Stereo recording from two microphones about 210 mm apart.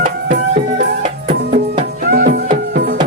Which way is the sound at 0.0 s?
50° right (ahead or behind).